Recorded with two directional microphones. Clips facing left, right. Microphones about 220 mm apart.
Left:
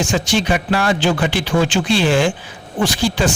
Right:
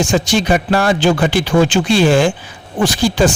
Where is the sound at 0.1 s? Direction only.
40° right (ahead or behind).